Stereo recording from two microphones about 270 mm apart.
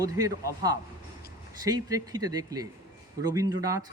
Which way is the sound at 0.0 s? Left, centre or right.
Centre.